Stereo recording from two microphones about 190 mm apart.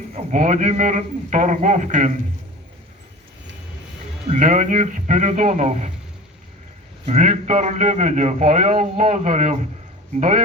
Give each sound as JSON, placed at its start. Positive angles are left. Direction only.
{"t": 0.1, "sound": "a man's voice", "side_deg": -40}
{"t": 4.3, "sound": "a man's voice", "side_deg": -40}
{"t": 7.0, "sound": "a man's voice", "side_deg": -35}